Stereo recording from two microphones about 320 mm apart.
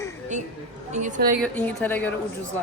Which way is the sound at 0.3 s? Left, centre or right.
Right.